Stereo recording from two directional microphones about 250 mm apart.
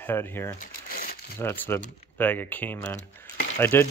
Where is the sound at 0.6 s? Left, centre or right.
Left.